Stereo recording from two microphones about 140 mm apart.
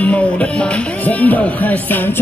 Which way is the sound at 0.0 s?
10° left (ahead or behind).